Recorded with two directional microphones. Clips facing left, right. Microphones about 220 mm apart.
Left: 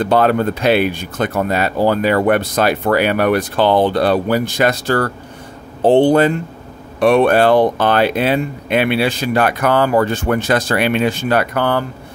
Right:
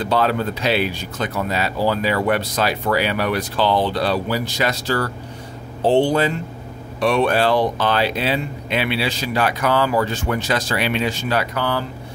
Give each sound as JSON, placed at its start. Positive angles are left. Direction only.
{"t": 0.0, "sound": "speech", "side_deg": 55}